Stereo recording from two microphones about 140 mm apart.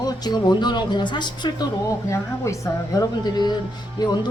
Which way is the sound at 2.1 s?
20° left (ahead or behind).